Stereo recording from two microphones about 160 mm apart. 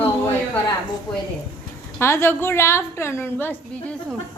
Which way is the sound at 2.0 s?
15° left (ahead or behind).